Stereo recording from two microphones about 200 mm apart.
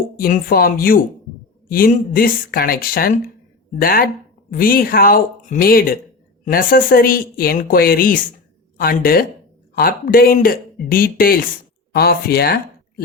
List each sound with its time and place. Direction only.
0.2 s speech: 50° left (ahead or behind)